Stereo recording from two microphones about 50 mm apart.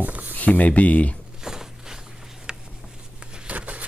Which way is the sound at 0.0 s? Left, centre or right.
Right.